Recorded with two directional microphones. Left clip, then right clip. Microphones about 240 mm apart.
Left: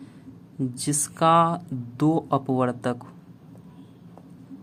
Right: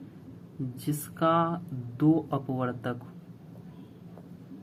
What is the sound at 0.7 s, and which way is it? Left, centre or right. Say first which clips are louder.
Speech: left 5 dB; left.